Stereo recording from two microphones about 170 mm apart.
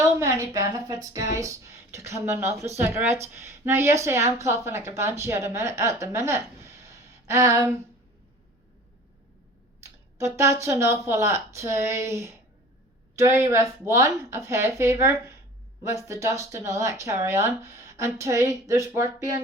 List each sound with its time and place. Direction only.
0.0 s a sound: 15° right (ahead or behind)
1.0 s a woman's voice: 20° right (ahead or behind)
9.8 s a woman's voice: 15° right (ahead or behind)